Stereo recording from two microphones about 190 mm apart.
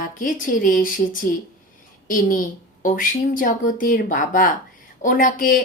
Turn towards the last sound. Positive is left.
turn(degrees=45)  # may be behind; listen again after turning